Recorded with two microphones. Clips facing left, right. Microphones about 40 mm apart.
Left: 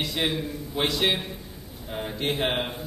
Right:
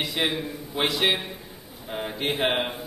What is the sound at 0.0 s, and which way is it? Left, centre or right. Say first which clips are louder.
A man's voice: right 1 dB; centre.